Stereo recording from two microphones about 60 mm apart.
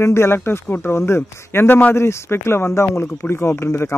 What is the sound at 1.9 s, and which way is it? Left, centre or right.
Speech, left.